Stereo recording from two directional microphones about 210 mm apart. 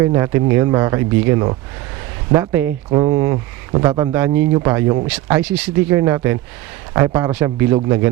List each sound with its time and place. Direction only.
0.0 s speech: 15° right (ahead or behind)